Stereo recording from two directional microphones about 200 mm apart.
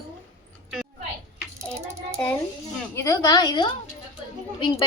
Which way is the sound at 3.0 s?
15° left (ahead or behind).